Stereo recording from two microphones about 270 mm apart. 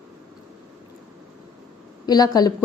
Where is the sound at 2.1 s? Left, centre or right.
Centre.